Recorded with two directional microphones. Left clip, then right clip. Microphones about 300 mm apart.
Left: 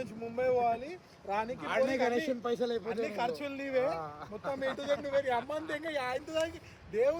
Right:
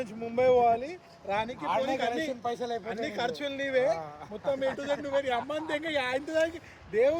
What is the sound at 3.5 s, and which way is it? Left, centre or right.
Speech, centre.